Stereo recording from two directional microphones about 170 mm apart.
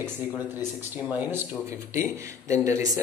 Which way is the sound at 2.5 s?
20° right (ahead or behind).